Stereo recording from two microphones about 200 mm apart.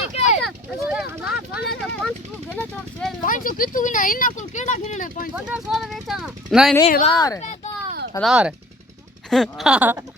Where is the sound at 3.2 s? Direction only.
45° left (ahead or behind).